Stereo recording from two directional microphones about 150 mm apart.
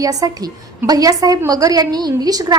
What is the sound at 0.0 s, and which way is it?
A woman's voice, 25° right (ahead or behind).